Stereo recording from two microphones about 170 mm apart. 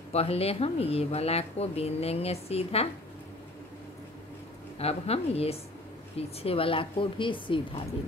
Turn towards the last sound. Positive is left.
turn(degrees=30)  # may be behind; listen again after turning